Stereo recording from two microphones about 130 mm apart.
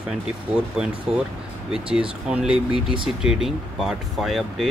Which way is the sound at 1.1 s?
5° right (ahead or behind).